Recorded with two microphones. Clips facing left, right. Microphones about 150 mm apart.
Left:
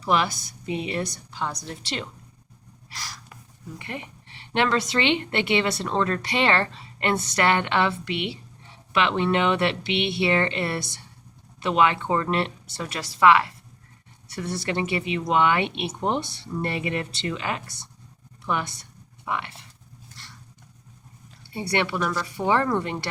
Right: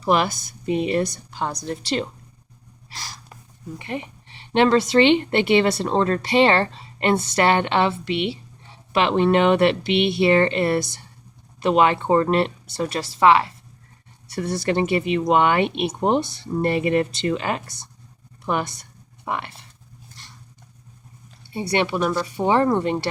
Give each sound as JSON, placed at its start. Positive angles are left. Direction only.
{"t": 0.0, "sound": "speech", "side_deg": -50}
{"t": 1.8, "sound": "speech", "side_deg": -35}
{"t": 2.9, "sound": "gasp", "side_deg": -25}
{"t": 3.8, "sound": "speech", "side_deg": -25}
{"t": 14.3, "sound": "speech", "side_deg": -40}
{"t": 21.5, "sound": "speech", "side_deg": -20}